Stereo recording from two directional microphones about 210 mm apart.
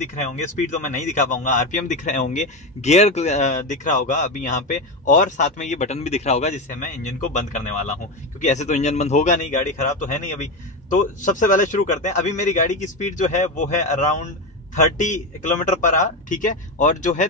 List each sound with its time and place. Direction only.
1.0 s a man's voice: 35° left (ahead or behind)